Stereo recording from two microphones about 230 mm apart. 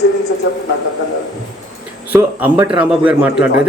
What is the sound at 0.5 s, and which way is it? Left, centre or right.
Speech, left.